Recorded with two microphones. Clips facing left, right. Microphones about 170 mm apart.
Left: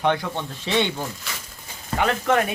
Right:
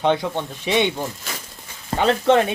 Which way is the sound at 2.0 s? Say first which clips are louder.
Right 4 dB; 30° right (ahead or behind).